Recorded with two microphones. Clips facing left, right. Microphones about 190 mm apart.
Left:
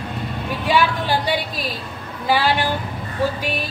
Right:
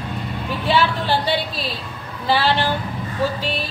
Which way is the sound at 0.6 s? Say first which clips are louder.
Even; 15° left (ahead or behind).